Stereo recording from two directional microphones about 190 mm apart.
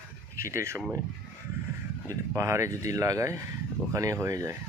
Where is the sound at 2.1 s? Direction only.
15° right (ahead or behind).